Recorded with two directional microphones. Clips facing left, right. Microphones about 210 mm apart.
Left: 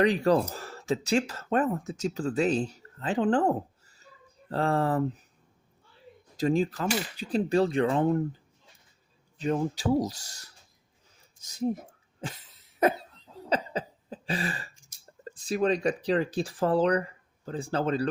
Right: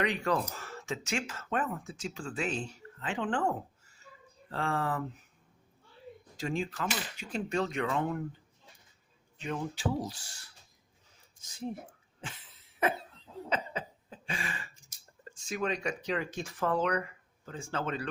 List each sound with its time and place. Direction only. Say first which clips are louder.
0.0 s speech: left 8 dB; 35° left (ahead or behind)
6.3 s cutlery: left 9 dB; 35° left (ahead or behind)
9.4 s cutlery: left 7 dB; 40° left (ahead or behind)
11.3 s speech: left 9 dB; 40° left (ahead or behind)
12.2 s cough: left 7 dB; 40° left (ahead or behind)
13.5 s a sound: left 6 dB; 35° left (ahead or behind)
15.2 s speech: left 7 dB; 35° left (ahead or behind)